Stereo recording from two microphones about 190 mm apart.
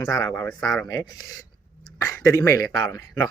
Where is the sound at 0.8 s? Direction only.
15° left (ahead or behind).